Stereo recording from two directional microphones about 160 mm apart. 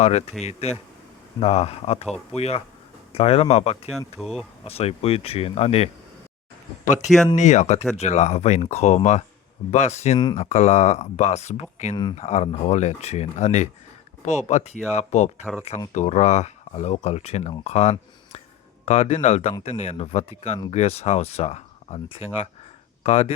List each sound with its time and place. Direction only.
0.0 s speech: 40° left (ahead or behind)
3.9 s speech: centre (ahead or behind)
4.6 s speech: 40° left (ahead or behind)
7.3 s speech: 45° left (ahead or behind)